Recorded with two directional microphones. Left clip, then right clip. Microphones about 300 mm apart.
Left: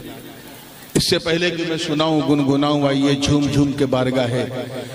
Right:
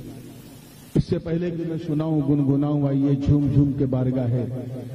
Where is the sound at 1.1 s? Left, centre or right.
Centre.